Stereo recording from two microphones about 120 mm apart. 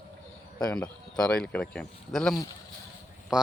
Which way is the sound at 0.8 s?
5° left (ahead or behind).